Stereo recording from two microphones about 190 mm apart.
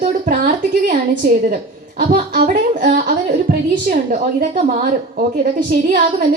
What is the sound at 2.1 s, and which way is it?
A woman's voice, 45° right (ahead or behind).